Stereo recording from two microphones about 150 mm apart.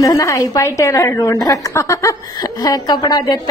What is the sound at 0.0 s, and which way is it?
A woman's voice, 20° left (ahead or behind).